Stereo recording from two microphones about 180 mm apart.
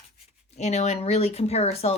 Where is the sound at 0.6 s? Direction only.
40° left (ahead or behind).